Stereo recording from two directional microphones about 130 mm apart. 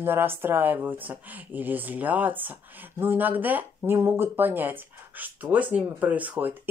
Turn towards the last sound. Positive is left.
turn(degrees=-15)  # may be behind; listen again after turning